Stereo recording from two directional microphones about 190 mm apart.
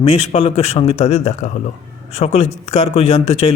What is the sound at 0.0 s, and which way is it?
Speech, 35° left (ahead or behind).